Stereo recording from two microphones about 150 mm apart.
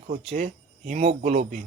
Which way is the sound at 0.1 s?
50° right (ahead or behind).